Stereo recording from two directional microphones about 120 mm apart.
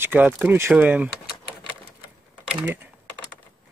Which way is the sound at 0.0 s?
15° right (ahead or behind).